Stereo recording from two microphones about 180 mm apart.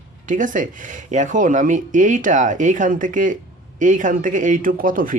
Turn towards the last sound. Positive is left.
turn(degrees=-50)  # may be behind; listen again after turning